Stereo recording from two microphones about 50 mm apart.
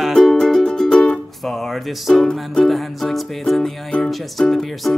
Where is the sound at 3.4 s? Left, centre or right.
Centre.